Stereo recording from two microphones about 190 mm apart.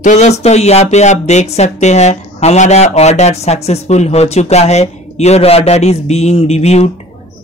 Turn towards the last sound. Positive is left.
turn(degrees=35)  # may be behind; listen again after turning